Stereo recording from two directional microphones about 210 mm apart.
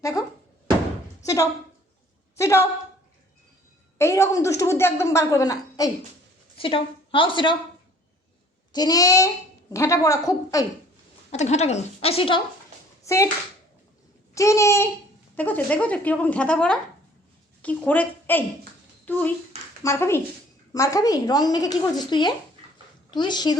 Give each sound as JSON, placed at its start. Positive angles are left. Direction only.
{"t": 0.0, "sound": "a sound", "side_deg": 15}
{"t": 2.3, "sound": "a woman's voice", "side_deg": 15}
{"t": 3.9, "sound": "a woman's voice", "side_deg": 10}
{"t": 8.7, "sound": "a woman's voice", "side_deg": 20}
{"t": 11.3, "sound": "a woman's voice", "side_deg": 30}
{"t": 13.1, "sound": "speech", "side_deg": 15}
{"t": 14.3, "sound": "a woman's voice", "side_deg": 15}